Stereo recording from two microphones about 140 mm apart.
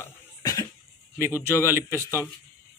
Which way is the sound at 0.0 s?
25° left (ahead or behind).